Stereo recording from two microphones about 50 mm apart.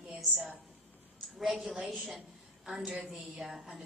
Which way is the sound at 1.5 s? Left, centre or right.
Centre.